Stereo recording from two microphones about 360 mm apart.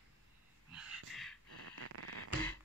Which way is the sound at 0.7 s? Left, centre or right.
Centre.